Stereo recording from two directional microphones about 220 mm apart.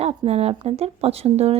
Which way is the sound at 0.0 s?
25° right (ahead or behind).